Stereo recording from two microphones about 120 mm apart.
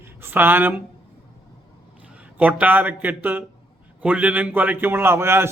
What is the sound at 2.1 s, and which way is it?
A man's voice, 10° right (ahead or behind).